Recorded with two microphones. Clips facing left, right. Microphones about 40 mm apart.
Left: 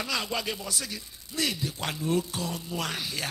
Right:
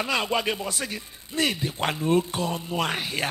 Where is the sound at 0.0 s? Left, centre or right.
Right.